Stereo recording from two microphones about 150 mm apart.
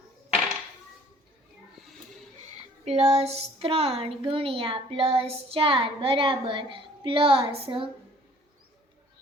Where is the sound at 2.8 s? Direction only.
45° right (ahead or behind).